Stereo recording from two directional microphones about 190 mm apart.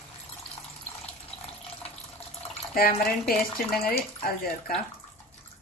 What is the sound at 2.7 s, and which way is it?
Speech, 50° left (ahead or behind).